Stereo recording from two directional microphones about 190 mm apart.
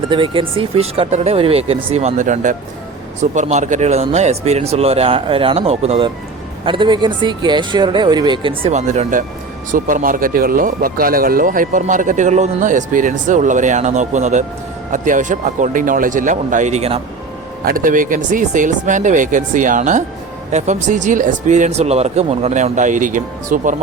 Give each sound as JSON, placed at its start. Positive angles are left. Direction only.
{"t": 0.1, "sound": "speech", "side_deg": -25}
{"t": 17.7, "sound": "speech", "side_deg": -45}